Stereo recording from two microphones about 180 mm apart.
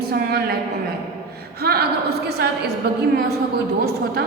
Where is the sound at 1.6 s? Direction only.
60° right (ahead or behind).